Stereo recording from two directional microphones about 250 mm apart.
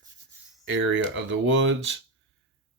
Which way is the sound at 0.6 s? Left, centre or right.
Right.